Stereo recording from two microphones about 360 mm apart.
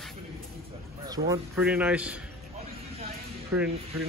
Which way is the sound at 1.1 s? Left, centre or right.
Centre.